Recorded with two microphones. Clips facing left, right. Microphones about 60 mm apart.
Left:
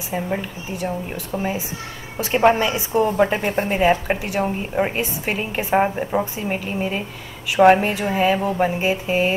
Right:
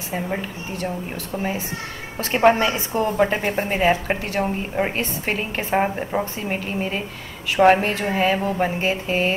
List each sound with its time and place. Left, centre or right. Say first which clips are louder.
0.1 s a woman's voice: left 2 dB; centre
0.7 s speech: left 2 dB; centre
2.3 s a woman's voice: even; centre